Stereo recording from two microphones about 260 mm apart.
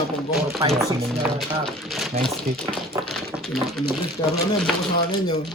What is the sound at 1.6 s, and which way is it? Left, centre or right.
Speech, centre.